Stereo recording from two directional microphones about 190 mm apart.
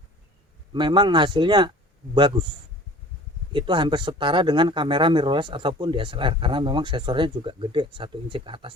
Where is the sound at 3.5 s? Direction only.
25° right (ahead or behind).